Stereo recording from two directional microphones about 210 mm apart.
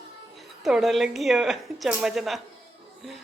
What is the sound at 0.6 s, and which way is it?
A woman's voice, centre (ahead or behind).